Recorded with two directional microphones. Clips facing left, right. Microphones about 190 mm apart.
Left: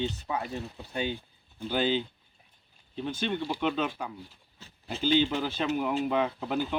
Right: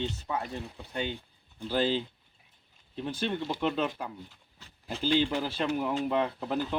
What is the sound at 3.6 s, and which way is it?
Speech, centre (ahead or behind).